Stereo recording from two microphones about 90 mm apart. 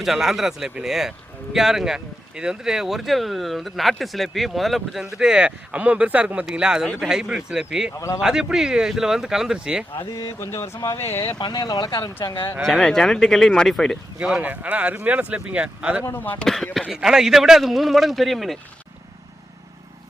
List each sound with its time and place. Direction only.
0.0 s speech: 5° right (ahead or behind)
7.9 s speech: 35° left (ahead or behind)
8.2 s speech: 10° right (ahead or behind)
10.1 s speech: 40° left (ahead or behind)
10.5 s speech: 30° left (ahead or behind)
11.3 s speech: 55° left (ahead or behind)
12.3 s speech: 60° left (ahead or behind)
12.6 s speech: 5° left (ahead or behind)
14.2 s speech: 10° right (ahead or behind)
16.0 s speech: 25° left (ahead or behind)
16.4 s speech: centre (ahead or behind)